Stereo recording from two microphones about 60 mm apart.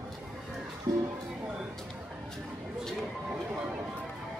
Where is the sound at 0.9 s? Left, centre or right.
Right.